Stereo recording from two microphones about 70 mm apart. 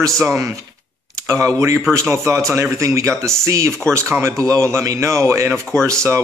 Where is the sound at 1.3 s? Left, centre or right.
Right.